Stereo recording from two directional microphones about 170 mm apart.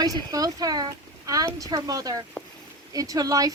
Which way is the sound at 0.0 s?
20° right (ahead or behind).